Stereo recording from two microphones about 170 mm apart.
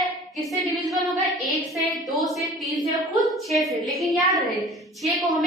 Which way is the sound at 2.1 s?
Centre (ahead or behind).